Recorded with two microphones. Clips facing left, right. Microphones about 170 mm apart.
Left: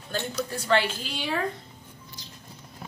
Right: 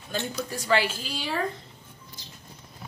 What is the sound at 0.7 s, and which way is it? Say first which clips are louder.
Speech: even; 5° right (ahead or behind).